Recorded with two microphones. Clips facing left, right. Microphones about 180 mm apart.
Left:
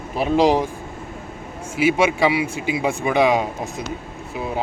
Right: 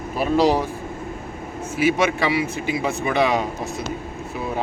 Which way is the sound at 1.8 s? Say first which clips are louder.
Left 2 dB; 10° left (ahead or behind).